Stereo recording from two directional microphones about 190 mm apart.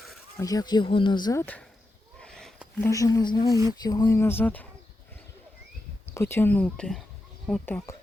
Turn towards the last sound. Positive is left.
turn(degrees=10)  # may be behind; listen again after turning